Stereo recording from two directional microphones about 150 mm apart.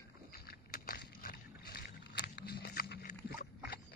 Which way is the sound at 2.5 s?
90° left.